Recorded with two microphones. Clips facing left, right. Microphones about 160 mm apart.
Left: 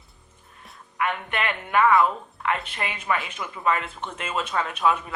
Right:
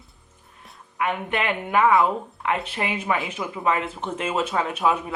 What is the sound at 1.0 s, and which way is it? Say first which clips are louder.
A woman's voice: right 2 dB; 15° right (ahead or behind).